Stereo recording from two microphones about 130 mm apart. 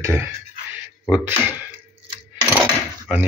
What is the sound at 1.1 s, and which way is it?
Speech, 15° right (ahead or behind).